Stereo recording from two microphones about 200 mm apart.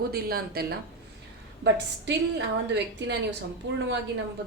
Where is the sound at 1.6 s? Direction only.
60° right (ahead or behind).